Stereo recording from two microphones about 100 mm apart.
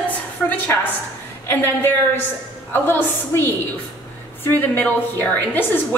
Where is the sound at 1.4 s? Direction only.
25° left (ahead or behind).